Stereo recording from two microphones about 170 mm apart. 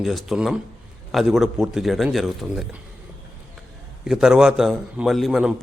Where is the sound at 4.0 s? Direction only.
5° right (ahead or behind).